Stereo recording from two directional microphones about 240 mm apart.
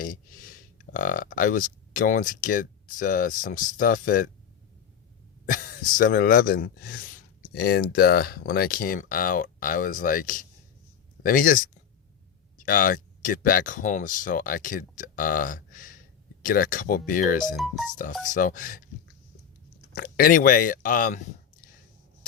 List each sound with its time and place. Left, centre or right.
0.0 s speech: left
5.5 s speech: left
17.6 s speech: centre
17.9 s speech: left
19.9 s speech: left